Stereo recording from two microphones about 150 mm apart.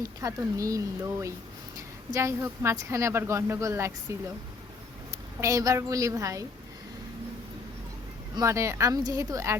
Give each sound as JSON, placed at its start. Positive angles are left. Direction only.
{"t": 0.0, "sound": "a woman's voice", "side_deg": -20}
{"t": 5.4, "sound": "a woman's voice", "side_deg": -20}
{"t": 8.4, "sound": "a woman's voice", "side_deg": -20}